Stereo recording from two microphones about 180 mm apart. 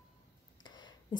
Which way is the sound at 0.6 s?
25° left (ahead or behind).